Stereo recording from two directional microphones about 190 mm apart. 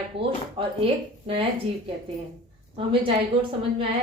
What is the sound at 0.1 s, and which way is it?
Speech, 65° right (ahead or behind).